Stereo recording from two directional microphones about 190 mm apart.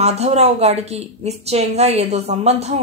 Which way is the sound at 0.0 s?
35° right (ahead or behind).